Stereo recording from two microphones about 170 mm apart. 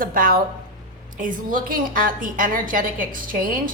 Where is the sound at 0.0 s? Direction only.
55° right (ahead or behind).